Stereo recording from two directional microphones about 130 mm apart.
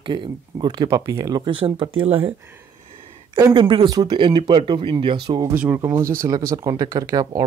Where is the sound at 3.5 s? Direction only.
40° right (ahead or behind).